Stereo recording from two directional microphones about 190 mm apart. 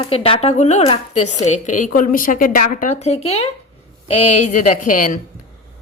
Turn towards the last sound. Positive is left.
turn(degrees=45)  # may be behind; listen again after turning